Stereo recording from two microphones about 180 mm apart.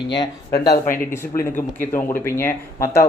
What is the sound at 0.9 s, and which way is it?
Speech, 50° left (ahead or behind).